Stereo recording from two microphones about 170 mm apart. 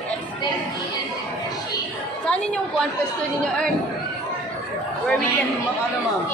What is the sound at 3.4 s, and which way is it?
Speech, 5° left (ahead or behind).